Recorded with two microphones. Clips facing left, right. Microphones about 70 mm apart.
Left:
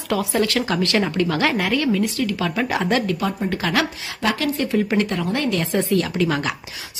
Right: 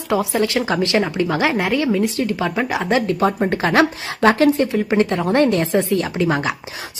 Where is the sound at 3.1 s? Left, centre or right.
Right.